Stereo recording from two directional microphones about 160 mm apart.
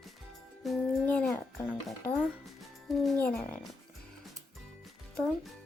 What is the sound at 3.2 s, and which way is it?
Speech, 10° left (ahead or behind).